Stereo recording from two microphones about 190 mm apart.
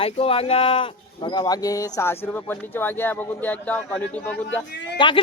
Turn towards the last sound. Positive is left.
turn(degrees=25)  # may be behind; listen again after turning